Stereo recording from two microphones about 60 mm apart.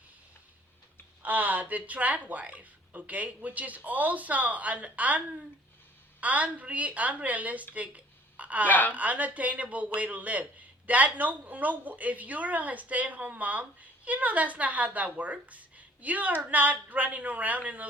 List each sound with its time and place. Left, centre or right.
1.2 s a man's voice: right
7.7 s a sound: right
8.6 s a woman's voice: left
9.0 s a man's voice: right